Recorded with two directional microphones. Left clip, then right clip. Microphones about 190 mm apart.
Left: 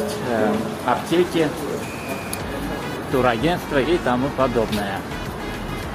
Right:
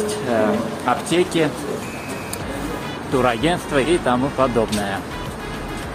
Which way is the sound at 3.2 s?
10° right (ahead or behind).